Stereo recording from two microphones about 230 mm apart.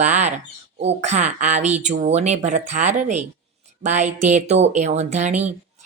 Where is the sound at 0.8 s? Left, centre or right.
Right.